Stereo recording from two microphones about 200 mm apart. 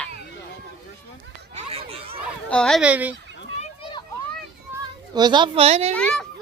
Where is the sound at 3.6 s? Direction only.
25° left (ahead or behind).